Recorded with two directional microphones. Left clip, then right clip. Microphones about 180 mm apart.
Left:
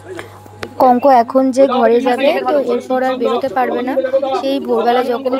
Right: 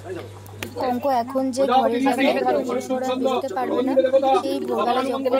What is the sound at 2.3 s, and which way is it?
Speech, 5° right (ahead or behind).